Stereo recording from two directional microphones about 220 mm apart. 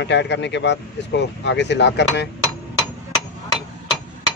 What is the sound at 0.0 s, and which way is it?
Speech, 50° left (ahead or behind).